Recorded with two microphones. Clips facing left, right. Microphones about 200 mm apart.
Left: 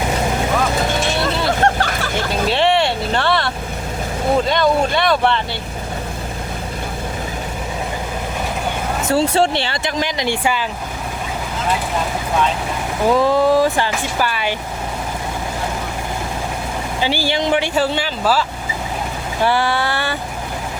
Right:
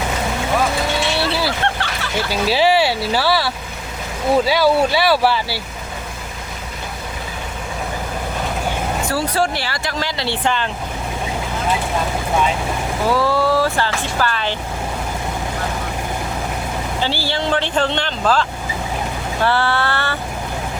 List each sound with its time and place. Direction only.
0.9 s vehicle: 45° left (ahead or behind)
2.3 s speech: 5° right (ahead or behind)
9.0 s speech: 25° left (ahead or behind); by 10.7 s 10° left (ahead or behind)
13.1 s speech: 20° left (ahead or behind)
17.0 s speech: 15° left (ahead or behind)